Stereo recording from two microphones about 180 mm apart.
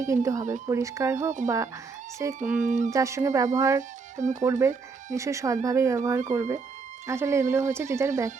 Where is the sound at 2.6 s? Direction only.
45° right (ahead or behind).